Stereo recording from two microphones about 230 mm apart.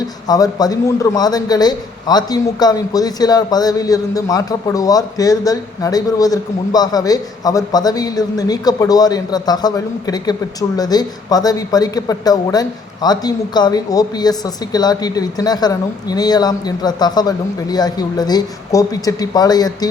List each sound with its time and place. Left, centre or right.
0.3 s a man's voice: centre